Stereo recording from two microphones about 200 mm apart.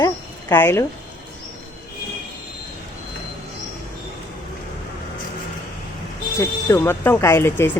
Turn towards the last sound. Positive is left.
turn(degrees=10)  # may be behind; listen again after turning